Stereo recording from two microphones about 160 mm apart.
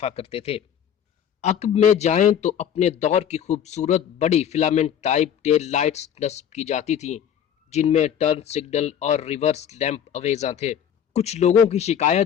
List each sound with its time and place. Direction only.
0.0 s speech: 40° left (ahead or behind)